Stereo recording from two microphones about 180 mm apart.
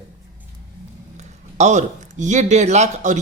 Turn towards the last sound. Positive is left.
turn(degrees=-40)  # may be behind; listen again after turning